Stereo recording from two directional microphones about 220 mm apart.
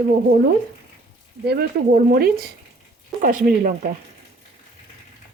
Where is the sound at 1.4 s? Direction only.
40° right (ahead or behind).